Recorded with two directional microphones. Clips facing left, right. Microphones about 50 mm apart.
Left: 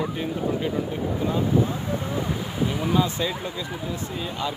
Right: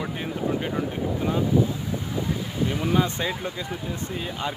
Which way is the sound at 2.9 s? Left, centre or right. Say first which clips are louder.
Left 1 dB; right.